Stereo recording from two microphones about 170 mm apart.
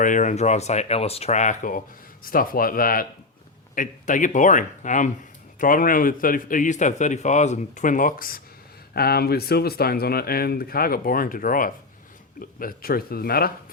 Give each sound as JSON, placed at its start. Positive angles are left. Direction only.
{"t": 0.0, "sound": "a man's voice", "side_deg": 50}